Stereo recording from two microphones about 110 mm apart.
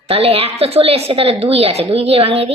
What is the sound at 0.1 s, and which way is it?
A woman's voice, 60° right (ahead or behind).